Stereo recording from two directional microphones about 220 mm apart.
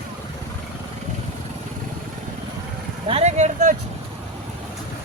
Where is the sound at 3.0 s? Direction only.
30° right (ahead or behind).